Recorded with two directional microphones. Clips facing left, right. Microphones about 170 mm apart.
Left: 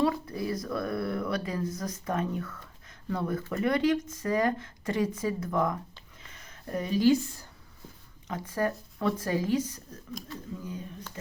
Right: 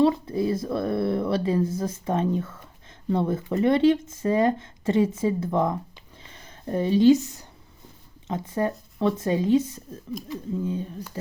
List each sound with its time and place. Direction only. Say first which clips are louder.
0.0 s speech: right 7 dB; 25° right (ahead or behind)